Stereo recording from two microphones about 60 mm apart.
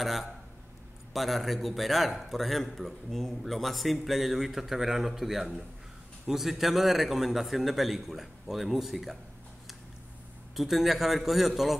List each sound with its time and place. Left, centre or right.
0.0 s a man's voice: centre
10.5 s a man's voice: centre